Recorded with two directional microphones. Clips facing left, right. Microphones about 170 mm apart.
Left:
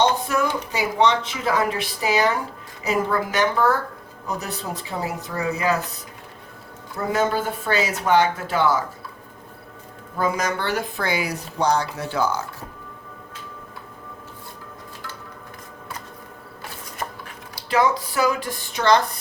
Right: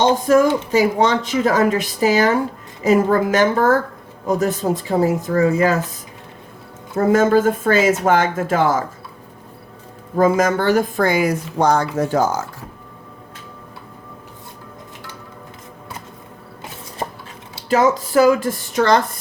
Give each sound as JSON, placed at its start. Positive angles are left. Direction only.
{"t": 0.3, "sound": "speech", "side_deg": -45}
{"t": 6.9, "sound": "speech", "side_deg": -45}
{"t": 10.2, "sound": "speech", "side_deg": -45}
{"t": 17.7, "sound": "speech", "side_deg": -45}